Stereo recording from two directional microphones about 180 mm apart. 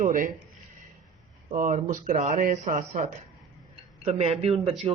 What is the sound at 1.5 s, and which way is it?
Speech, 45° right (ahead or behind).